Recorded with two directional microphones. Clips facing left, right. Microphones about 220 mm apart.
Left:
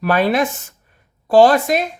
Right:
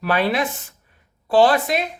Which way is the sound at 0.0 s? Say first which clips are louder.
Left 4 dB; 45° left (ahead or behind).